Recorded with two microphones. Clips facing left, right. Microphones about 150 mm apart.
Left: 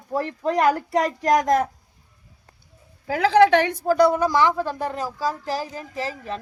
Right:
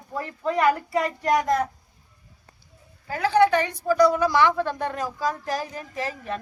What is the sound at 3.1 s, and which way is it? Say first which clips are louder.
Speech: left 4 dB; 90° left.